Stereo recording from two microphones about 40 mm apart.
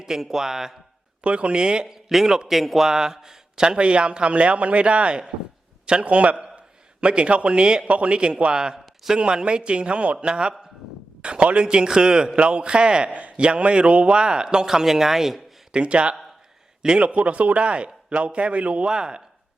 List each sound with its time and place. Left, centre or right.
0.0 s speech: centre
1.2 s a man's voice: right
2.0 s speech: centre
2.8 s a man's voice: centre
3.8 s a man's voice: right; by 15.4 s centre
15.7 s a man's voice: right
18.9 s a man's voice: centre